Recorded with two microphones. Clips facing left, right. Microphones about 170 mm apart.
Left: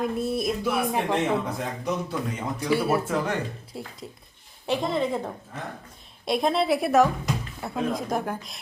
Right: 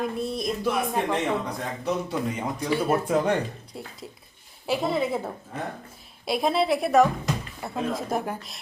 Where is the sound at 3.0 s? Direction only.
20° right (ahead or behind).